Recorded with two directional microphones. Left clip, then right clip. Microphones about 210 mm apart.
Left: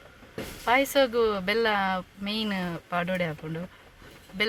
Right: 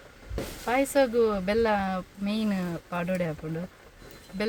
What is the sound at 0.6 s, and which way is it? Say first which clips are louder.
Speech: left 2 dB; centre (ahead or behind).